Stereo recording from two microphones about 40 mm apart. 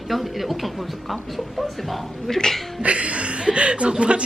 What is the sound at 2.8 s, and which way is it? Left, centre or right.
Speech, right.